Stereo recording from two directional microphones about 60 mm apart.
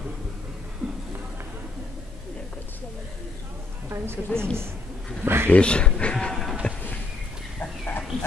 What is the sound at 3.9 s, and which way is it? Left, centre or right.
Music, right.